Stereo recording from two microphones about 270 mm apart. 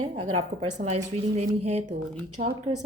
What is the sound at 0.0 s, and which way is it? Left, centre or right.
A woman's voice, right.